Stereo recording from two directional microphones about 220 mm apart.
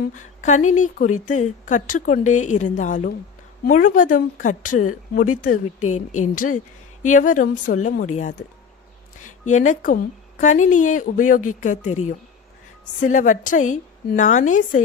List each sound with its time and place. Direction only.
0.1 s speech: 35° left (ahead or behind)
6.3 s speech: 35° left (ahead or behind)
9.5 s speech: 35° left (ahead or behind)
13.0 s speech: 35° left (ahead or behind)